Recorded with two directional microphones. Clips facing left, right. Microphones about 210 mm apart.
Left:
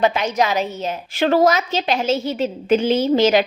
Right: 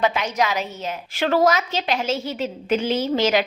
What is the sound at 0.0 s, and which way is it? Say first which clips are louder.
A woman's voice: left 3 dB; 35° left (ahead or behind).